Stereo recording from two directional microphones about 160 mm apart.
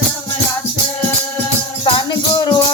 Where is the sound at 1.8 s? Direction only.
30° left (ahead or behind).